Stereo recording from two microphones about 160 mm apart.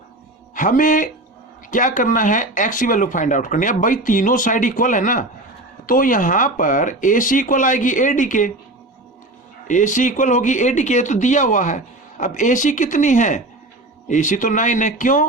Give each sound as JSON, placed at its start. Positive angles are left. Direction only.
{"t": 0.5, "sound": "speech", "side_deg": 55}
{"t": 9.6, "sound": "speech", "side_deg": 50}